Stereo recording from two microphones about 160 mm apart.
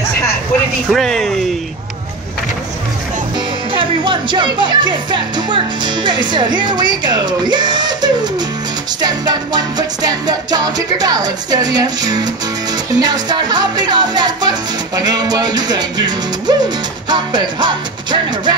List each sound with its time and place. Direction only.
0.9 s speech: centre (ahead or behind)
3.7 s music: 30° right (ahead or behind)